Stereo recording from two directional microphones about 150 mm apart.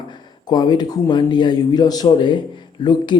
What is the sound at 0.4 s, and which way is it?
Speech, 30° left (ahead or behind).